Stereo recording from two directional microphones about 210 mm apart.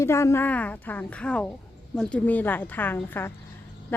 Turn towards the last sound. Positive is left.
turn(degrees=10)  # may be behind; listen again after turning